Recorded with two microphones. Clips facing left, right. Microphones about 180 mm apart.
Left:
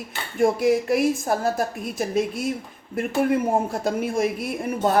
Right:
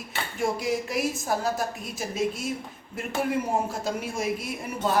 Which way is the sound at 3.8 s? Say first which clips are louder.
Left 6 dB; 55° left (ahead or behind).